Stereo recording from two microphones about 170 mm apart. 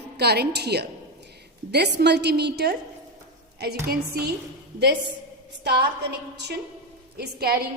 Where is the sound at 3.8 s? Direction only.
65° right (ahead or behind).